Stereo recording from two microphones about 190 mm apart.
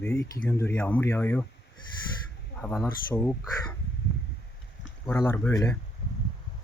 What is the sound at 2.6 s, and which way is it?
Speech, 10° left (ahead or behind).